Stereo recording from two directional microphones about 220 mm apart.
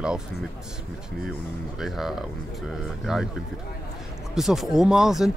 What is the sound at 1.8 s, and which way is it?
Speech, centre (ahead or behind).